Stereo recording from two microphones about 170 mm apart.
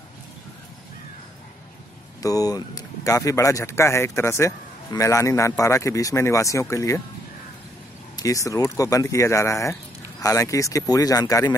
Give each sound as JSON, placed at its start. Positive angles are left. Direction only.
{"t": 2.2, "sound": "speech", "side_deg": 20}
{"t": 8.2, "sound": "speech", "side_deg": 20}